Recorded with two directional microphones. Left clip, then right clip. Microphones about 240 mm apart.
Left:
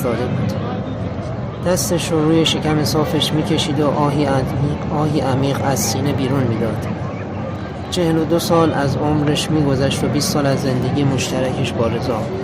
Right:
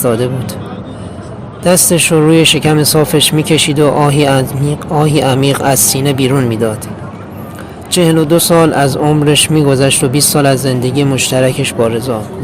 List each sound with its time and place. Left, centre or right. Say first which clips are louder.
1.6 s speech: right 9 dB; right
7.9 s speech: right 8 dB; right